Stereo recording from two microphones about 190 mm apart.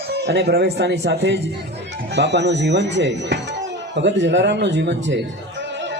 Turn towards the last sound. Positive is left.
turn(degrees=-70)  # may be behind; listen again after turning